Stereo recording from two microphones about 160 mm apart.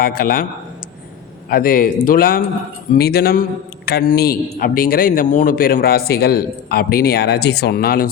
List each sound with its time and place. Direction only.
0.0 s a man's voice: 65° left (ahead or behind)
1.5 s a man's voice: 65° left (ahead or behind)
2.9 s a man's voice: 75° left (ahead or behind)